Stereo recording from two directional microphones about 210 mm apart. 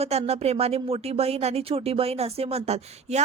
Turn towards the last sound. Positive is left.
turn(degrees=-30)  # may be behind; listen again after turning